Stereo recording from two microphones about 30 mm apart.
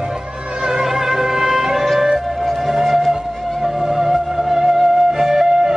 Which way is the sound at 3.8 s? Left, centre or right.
Centre.